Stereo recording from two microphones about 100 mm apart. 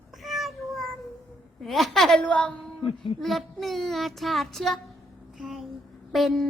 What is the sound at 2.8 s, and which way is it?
Speech, 65° left (ahead or behind).